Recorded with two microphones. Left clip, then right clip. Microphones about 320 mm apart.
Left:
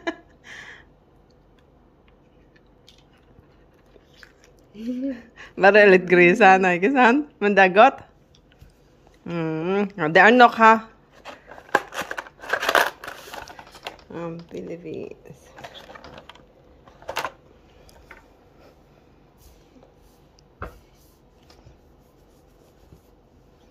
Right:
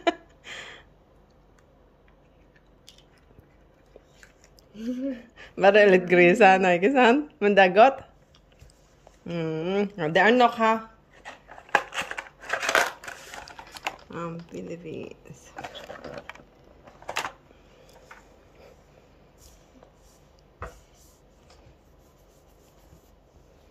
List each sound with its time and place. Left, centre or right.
0.0 s a sound: centre
5.0 s speech: centre
9.2 s speech: centre
11.4 s a sound: left
13.8 s speech: centre
15.0 s dishes: centre